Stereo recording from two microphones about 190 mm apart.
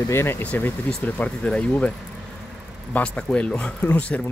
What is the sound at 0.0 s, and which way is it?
Speech, 15° left (ahead or behind).